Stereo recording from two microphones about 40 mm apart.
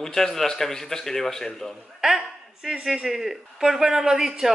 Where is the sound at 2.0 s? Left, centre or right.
Centre.